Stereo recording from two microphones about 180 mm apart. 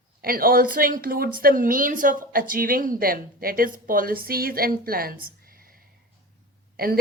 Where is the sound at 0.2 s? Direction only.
55° right (ahead or behind).